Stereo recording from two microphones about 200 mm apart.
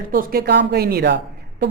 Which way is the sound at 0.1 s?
45° right (ahead or behind).